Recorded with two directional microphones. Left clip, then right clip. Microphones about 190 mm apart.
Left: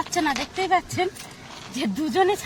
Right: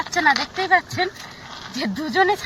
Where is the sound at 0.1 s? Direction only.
30° left (ahead or behind).